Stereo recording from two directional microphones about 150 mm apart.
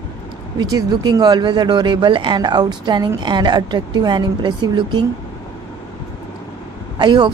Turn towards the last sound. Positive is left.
turn(degrees=-30)  # may be behind; listen again after turning